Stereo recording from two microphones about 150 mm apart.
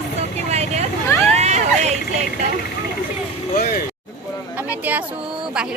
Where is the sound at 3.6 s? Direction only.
85° left.